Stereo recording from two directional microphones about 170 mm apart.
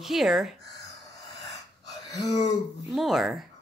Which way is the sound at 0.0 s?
Centre (ahead or behind).